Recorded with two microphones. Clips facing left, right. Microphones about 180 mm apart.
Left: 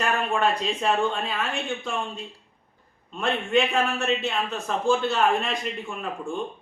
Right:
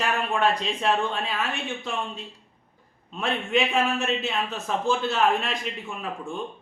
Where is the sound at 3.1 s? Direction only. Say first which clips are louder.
Left 2 dB; centre (ahead or behind).